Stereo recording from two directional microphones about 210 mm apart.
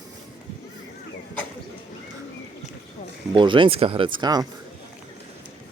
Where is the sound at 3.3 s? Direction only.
25° right (ahead or behind).